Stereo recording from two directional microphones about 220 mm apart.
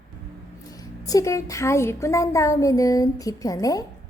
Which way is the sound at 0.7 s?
15° left (ahead or behind).